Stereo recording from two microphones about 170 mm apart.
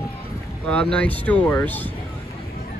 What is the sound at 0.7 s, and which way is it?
Speech, 5° left (ahead or behind).